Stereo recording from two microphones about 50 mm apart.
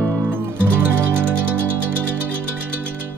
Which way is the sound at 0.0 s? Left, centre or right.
Right.